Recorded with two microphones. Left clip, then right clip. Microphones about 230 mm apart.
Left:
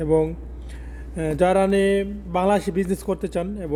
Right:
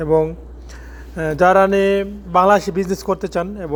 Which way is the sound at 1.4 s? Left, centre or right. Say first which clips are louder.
Right 6 dB; centre.